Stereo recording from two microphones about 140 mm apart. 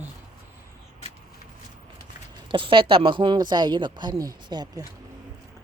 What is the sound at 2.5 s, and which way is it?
Speech, 35° right (ahead or behind).